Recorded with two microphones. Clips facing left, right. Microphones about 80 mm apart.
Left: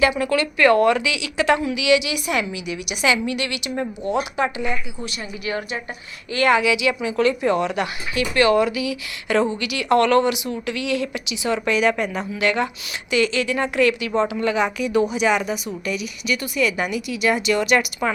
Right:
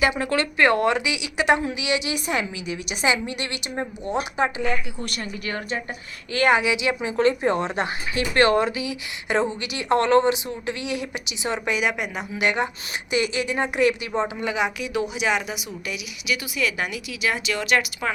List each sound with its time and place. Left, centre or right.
0.1 s a woman's voice: right
5.5 s a woman's voice: centre
6.3 s a woman's voice: right
11.7 s a woman's voice: centre
12.3 s a woman's voice: right; by 18.1 s centre